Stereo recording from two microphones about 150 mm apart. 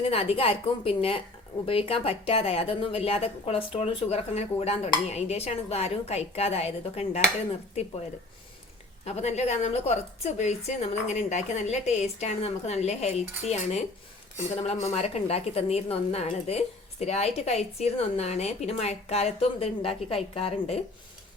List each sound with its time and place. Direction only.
0.0 s speech: 40° left (ahead or behind)
9.0 s a woman's voice: 45° left (ahead or behind)